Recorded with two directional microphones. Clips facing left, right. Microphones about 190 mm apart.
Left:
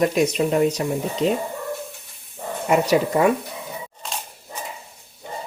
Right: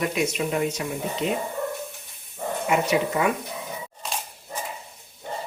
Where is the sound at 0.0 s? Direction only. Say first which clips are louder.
Left 6 dB; 40° left (ahead or behind).